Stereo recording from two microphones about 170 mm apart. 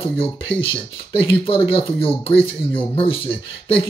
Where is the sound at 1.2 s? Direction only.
30° left (ahead or behind).